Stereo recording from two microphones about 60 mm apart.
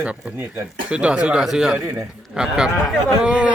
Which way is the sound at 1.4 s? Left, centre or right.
Centre.